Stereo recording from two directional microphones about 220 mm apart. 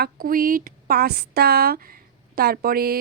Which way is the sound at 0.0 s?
40° right (ahead or behind).